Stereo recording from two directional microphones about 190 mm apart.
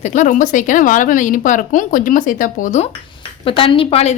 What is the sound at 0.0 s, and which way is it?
Speech, 40° left (ahead or behind).